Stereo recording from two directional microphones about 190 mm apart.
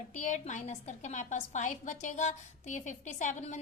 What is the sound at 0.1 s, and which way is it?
A woman's voice, 40° left (ahead or behind).